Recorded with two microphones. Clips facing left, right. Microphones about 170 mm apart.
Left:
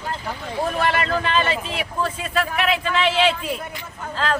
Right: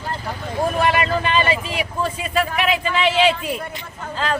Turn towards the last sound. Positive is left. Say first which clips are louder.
# even
turn(degrees=0)  # may be behind; listen again after turning